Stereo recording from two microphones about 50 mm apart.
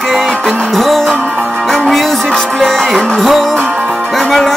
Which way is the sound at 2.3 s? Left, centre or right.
Centre.